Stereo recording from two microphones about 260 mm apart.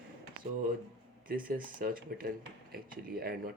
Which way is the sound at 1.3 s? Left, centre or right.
Right.